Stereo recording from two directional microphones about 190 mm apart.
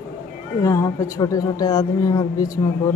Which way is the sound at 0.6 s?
15° left (ahead or behind).